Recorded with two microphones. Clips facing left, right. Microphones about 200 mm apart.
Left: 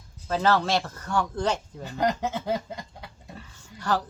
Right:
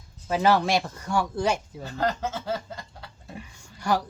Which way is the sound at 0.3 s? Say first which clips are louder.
Right 2 dB; 10° right (ahead or behind).